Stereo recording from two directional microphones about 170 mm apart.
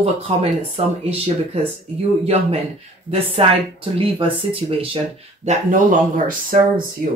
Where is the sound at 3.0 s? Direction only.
35° right (ahead or behind).